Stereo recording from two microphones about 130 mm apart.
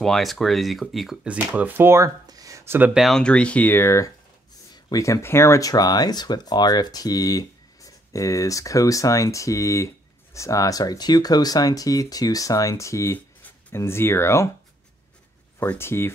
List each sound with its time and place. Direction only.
0.0 s speech: centre (ahead or behind); by 2.9 s 20° right (ahead or behind)
2.9 s speech: centre (ahead or behind); by 14.5 s 20° left (ahead or behind)
15.6 s speech: 15° left (ahead or behind)